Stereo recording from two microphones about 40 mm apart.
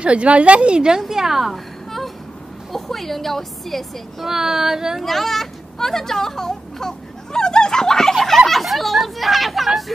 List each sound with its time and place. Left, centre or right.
0.0 s a woman's voice: right
1.0 s speech: centre
2.7 s a woman's voice: centre
4.3 s speech: centre
5.0 s speech: centre
8.1 s speech: centre